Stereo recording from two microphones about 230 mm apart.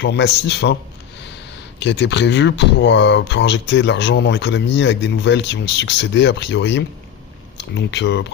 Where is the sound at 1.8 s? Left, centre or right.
Left.